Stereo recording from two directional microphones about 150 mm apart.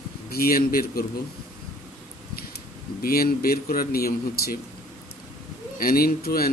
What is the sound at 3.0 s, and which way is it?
Speech, 85° left.